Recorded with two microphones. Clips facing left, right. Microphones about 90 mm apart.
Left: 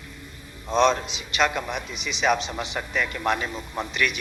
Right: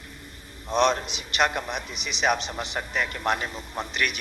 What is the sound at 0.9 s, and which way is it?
Speech, 20° left (ahead or behind).